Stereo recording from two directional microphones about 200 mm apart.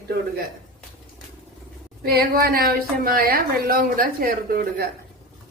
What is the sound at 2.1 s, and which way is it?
A woman's voice, 50° right (ahead or behind).